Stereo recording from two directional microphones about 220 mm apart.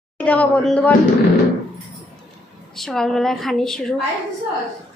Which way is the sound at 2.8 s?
Centre (ahead or behind).